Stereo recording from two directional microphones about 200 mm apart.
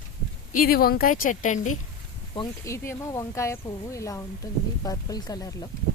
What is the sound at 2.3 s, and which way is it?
Speech, 20° left (ahead or behind).